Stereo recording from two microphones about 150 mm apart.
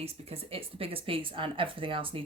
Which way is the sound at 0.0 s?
40° right (ahead or behind).